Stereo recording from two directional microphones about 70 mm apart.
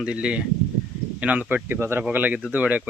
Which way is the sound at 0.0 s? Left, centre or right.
Centre.